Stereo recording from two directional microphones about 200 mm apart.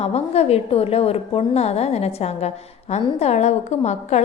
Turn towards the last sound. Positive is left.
turn(degrees=35)  # may be behind; listen again after turning